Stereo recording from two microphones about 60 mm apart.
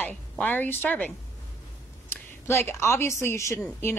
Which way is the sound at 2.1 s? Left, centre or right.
Left.